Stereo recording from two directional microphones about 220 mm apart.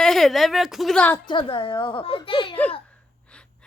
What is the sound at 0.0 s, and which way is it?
A woman's voice, centre (ahead or behind).